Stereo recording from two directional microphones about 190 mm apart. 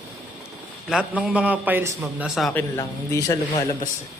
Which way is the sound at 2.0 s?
Centre (ahead or behind).